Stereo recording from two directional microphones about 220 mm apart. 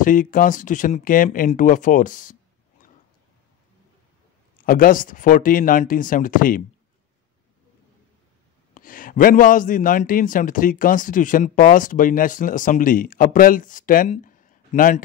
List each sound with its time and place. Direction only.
0.0 s a man's voice: 40° left (ahead or behind)
4.6 s a man's voice: 40° left (ahead or behind)
8.7 s a man's voice: 40° left (ahead or behind)